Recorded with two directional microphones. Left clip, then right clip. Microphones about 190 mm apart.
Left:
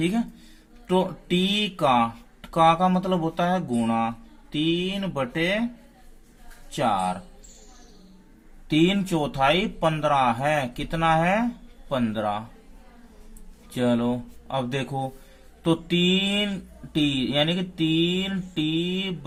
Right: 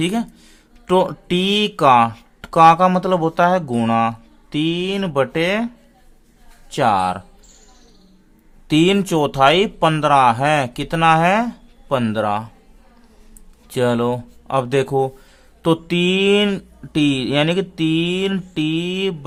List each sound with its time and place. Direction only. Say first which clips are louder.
0.0 s speech: right 5 dB; 35° right (ahead or behind)
6.7 s speech: right 7 dB; 45° right (ahead or behind)
8.6 s speech: right 7 dB; 40° right (ahead or behind)
13.7 s speech: right 7 dB; 40° right (ahead or behind)